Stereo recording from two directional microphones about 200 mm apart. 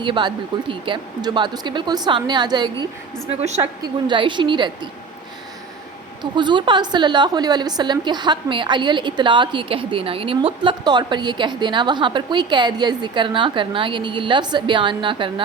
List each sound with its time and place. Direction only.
0.0 s a woman's voice: 25° right (ahead or behind)
6.3 s a woman's voice: 25° right (ahead or behind)